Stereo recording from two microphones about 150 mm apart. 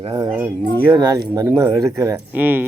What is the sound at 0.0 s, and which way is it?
Speech, 30° right (ahead or behind).